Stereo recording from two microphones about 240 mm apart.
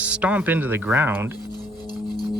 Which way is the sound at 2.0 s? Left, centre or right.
Centre.